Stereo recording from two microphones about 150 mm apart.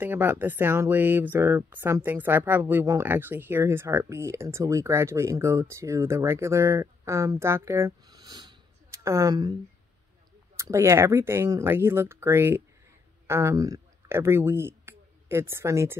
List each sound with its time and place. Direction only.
0.0 s speech: 15° right (ahead or behind)
10.6 s speech: 20° right (ahead or behind)